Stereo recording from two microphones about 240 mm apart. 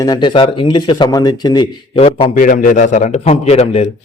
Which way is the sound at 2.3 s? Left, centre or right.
Left.